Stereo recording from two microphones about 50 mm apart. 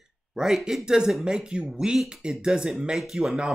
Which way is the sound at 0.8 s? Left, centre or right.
Centre.